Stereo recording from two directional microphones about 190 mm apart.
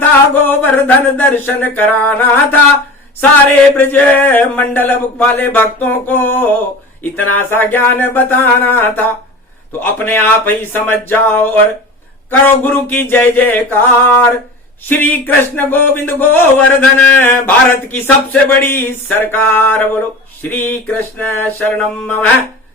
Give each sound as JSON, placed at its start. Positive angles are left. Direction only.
{"t": 0.4, "sound": "speech", "side_deg": 10}
{"t": 3.8, "sound": "speech", "side_deg": 10}